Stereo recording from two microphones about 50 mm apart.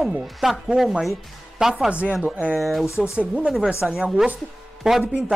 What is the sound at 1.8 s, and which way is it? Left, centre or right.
Speech, right.